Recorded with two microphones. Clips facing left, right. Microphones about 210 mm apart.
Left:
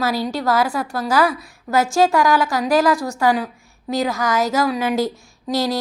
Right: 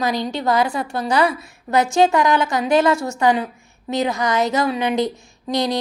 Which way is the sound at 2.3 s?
20° right (ahead or behind).